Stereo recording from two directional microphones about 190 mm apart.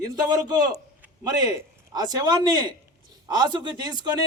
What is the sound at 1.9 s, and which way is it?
Speech, 20° right (ahead or behind).